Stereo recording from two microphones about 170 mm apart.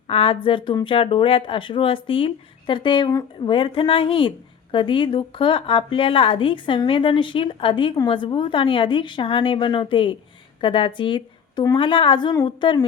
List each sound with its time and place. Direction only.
0.1 s a woman's voice: 30° left (ahead or behind)